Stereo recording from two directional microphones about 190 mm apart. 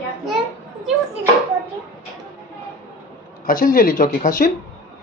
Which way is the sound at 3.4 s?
45° left (ahead or behind).